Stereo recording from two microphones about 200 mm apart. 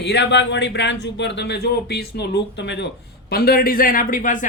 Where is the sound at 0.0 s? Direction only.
60° left (ahead or behind).